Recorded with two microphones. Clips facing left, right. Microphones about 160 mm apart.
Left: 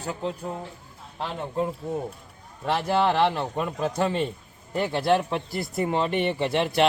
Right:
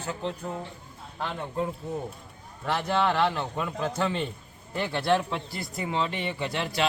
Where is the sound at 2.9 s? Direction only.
30° left (ahead or behind).